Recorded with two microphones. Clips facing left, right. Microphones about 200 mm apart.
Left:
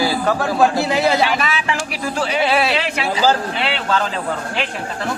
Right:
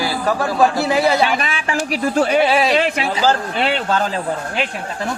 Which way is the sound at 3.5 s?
45° right (ahead or behind).